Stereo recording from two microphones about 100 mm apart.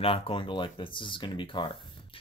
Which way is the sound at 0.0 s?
65° left (ahead or behind).